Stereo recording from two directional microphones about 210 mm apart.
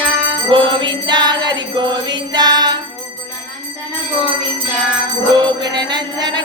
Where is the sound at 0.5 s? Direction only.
25° right (ahead or behind).